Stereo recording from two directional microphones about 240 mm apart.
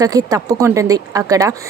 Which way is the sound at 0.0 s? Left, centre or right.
Centre.